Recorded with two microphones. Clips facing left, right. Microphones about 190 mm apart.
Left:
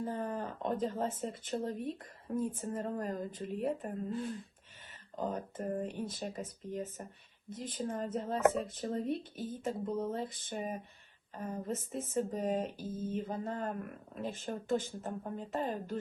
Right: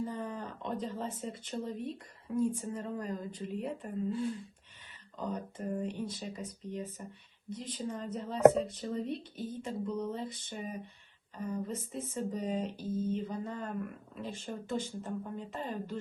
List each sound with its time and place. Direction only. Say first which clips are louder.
0.0 s speech: left 1 dB; 50° left (ahead or behind)